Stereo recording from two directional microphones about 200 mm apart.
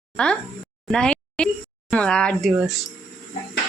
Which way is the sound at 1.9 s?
5° left (ahead or behind).